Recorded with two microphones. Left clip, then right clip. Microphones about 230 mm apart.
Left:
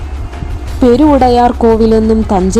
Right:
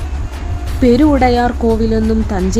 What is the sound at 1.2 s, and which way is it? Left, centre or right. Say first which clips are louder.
Speech: left 5 dB; centre.